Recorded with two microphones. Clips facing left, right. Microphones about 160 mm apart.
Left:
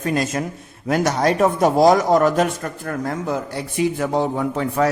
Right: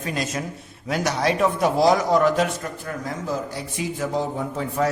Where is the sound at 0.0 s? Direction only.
50° left (ahead or behind).